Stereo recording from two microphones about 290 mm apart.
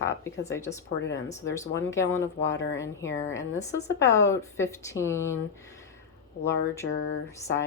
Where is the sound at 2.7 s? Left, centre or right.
Centre.